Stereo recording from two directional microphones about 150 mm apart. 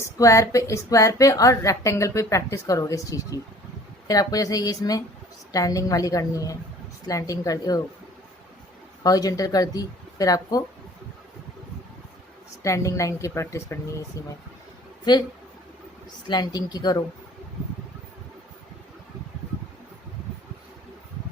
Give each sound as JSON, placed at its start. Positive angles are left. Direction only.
{"t": 0.2, "sound": "a woman's voice", "side_deg": 20}
{"t": 9.0, "sound": "a woman's voice", "side_deg": 25}
{"t": 12.6, "sound": "a woman's voice", "side_deg": 20}
{"t": 16.3, "sound": "a woman's voice", "side_deg": 25}